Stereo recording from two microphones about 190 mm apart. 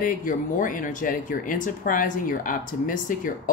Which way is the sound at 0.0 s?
45° left (ahead or behind).